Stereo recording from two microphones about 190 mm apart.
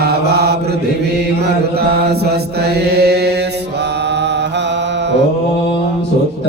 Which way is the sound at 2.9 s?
60° right (ahead or behind).